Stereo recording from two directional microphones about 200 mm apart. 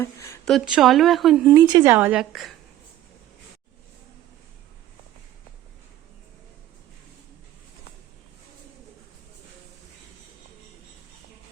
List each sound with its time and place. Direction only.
0.0 s speech: 15° left (ahead or behind)
0.4 s speech: centre (ahead or behind)
1.5 s a woman's voice: 20° right (ahead or behind); by 2.5 s 5° right (ahead or behind)